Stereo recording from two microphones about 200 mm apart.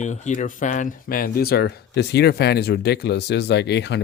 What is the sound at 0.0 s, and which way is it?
Speech, 35° left (ahead or behind).